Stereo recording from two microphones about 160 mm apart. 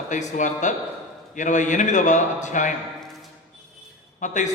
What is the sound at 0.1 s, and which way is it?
A man's voice, 50° left (ahead or behind).